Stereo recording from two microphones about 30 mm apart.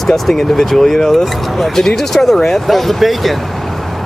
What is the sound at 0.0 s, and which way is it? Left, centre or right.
Speech, centre.